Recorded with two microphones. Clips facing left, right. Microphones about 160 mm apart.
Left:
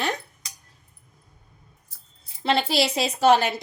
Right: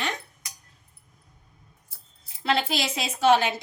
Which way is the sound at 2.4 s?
30° left (ahead or behind).